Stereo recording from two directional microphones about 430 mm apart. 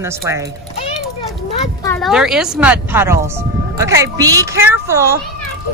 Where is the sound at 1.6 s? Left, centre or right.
Centre.